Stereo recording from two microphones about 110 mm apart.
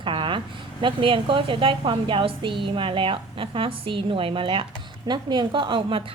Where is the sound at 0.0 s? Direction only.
50° right (ahead or behind).